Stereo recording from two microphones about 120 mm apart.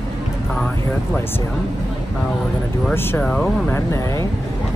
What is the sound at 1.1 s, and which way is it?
Speech, 20° left (ahead or behind).